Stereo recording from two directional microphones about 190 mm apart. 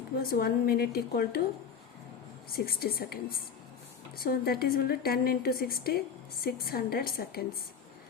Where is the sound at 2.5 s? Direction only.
50° left (ahead or behind).